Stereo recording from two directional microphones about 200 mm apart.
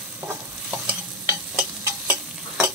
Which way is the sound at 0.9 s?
10° right (ahead or behind).